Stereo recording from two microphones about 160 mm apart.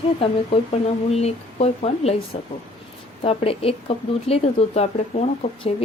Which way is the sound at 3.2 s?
35° left (ahead or behind).